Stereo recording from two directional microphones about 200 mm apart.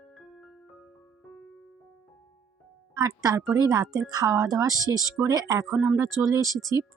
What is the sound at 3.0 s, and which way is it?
Music, 20° right (ahead or behind).